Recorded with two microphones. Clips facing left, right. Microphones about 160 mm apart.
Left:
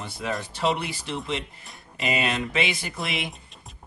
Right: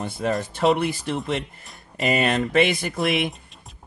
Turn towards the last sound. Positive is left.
turn(degrees=-50)  # may be behind; listen again after turning